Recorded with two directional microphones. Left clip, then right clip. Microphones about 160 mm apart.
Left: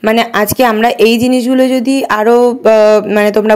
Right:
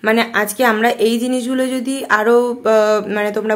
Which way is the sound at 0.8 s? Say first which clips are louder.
Left 6 dB; 45° left (ahead or behind).